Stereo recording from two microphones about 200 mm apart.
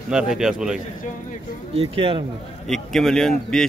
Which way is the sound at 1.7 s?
25° right (ahead or behind).